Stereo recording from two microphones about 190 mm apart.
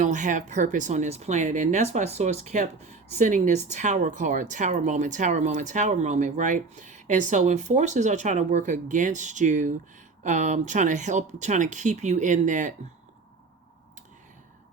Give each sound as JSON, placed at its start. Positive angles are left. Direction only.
{"t": 0.0, "sound": "a woman's voice", "side_deg": -40}